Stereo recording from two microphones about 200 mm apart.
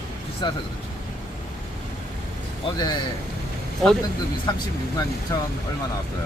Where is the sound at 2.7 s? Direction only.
20° left (ahead or behind).